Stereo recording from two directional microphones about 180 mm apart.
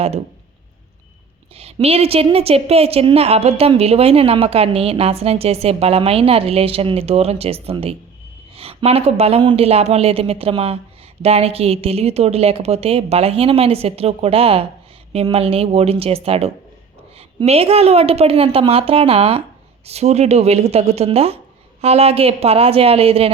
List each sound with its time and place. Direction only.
1.5 s a woman's voice: 35° right (ahead or behind)